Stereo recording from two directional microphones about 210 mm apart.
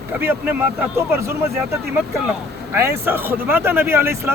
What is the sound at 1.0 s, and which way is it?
Speech, 10° right (ahead or behind).